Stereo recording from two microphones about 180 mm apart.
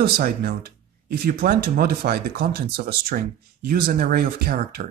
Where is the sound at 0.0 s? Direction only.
55° right (ahead or behind).